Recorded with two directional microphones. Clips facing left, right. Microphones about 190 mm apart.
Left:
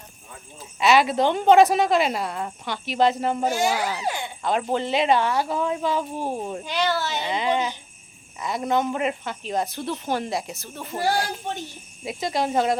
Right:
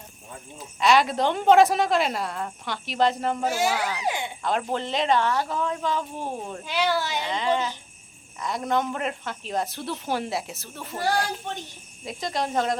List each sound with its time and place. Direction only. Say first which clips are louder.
0.8 s speech: left 2 dB; 5° left (ahead or behind)
3.8 s speech: left 2 dB; 10° left (ahead or behind)
4.0 s a sound: even; 20° right (ahead or behind)
4.4 s speech: left 4 dB; centre (ahead or behind)
6.7 s speech: right 1 dB; 10° right (ahead or behind)
7.2 s speech: left 1 dB; 10° left (ahead or behind)